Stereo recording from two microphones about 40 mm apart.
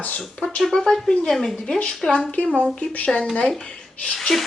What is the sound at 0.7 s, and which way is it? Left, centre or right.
Speech, centre.